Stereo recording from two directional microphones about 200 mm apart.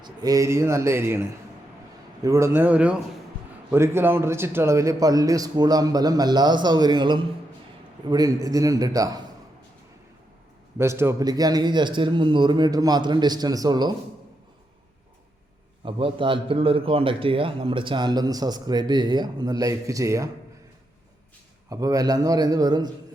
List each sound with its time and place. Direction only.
0.0 s a man's voice: 20° right (ahead or behind)
2.2 s a man's voice: 15° right (ahead or behind)
10.8 s a man's voice: 15° right (ahead or behind)
15.8 s a man's voice: 25° right (ahead or behind)
21.7 s a man's voice: 15° right (ahead or behind)